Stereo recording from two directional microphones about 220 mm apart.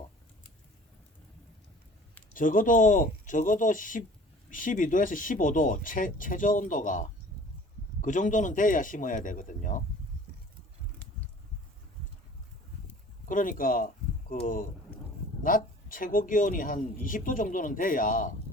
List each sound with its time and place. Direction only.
2.3 s speech: 35° left (ahead or behind)
13.2 s speech: 40° left (ahead or behind)